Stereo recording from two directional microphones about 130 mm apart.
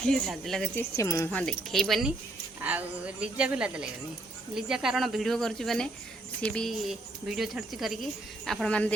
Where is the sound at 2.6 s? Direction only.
10° right (ahead or behind).